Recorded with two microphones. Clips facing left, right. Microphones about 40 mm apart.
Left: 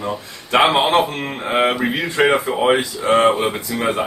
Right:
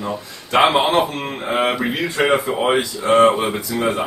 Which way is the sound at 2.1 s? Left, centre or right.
Centre.